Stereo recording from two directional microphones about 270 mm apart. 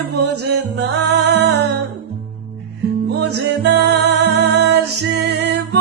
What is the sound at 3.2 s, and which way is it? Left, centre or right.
Music, right.